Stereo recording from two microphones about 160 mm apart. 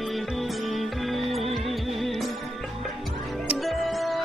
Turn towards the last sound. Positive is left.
turn(degrees=0)  # may be behind; listen again after turning